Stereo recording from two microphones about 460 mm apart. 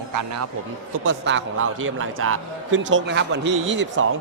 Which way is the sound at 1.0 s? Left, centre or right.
Right.